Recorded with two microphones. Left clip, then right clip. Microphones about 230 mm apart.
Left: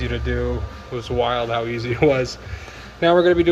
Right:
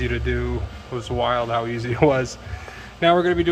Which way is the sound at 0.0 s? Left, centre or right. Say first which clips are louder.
Left 1 dB; centre.